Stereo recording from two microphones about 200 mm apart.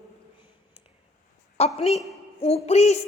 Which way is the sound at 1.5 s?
30° left (ahead or behind).